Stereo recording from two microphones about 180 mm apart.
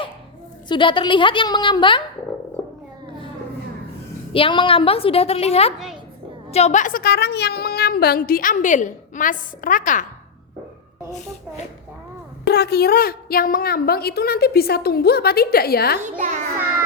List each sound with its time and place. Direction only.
0.7 s a woman's voice: 25° left (ahead or behind)
4.3 s a woman's voice: 30° left (ahead or behind); by 10.1 s 45° left (ahead or behind)
12.5 s a woman's voice: 65° left (ahead or behind)
16.0 s a child's voice: 45° right (ahead or behind)